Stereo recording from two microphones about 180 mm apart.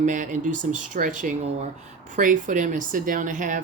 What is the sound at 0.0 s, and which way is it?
Speech, 45° right (ahead or behind).